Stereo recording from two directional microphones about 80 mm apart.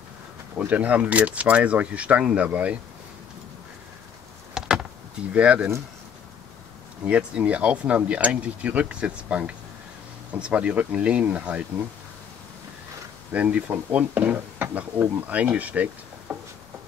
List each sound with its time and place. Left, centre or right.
0.6 s speech: centre
4.6 s power windows: centre
5.3 s speech: centre
7.1 s speech: centre
13.3 s speech: centre